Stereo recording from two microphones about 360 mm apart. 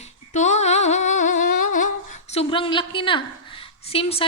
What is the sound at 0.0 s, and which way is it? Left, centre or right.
Humming, centre.